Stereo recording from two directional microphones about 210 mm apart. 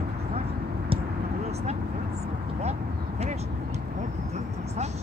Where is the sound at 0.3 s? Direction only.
30° right (ahead or behind).